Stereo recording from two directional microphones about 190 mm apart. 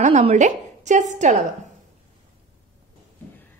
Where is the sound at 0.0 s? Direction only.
35° right (ahead or behind).